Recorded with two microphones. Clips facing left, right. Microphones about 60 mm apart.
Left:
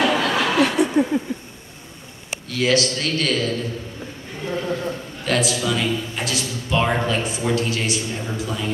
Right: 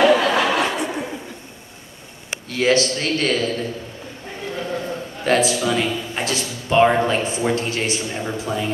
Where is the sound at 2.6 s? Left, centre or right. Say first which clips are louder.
Right 2 dB; right.